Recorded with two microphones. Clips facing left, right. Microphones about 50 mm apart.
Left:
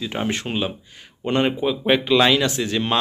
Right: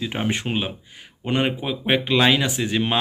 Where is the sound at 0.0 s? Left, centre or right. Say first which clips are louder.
Even; centre.